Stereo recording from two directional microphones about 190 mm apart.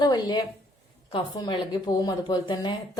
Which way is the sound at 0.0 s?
20° left (ahead or behind).